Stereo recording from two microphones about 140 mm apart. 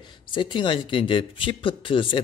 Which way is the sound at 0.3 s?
35° left (ahead or behind).